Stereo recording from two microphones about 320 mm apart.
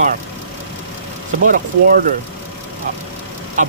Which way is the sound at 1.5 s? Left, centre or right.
Right.